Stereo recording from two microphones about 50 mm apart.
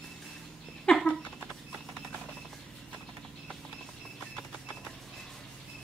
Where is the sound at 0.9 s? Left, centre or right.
Centre.